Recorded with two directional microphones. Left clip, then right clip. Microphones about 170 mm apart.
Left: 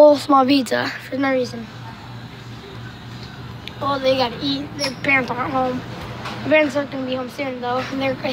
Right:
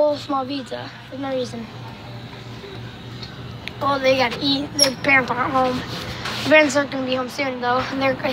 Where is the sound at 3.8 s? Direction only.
Centre (ahead or behind).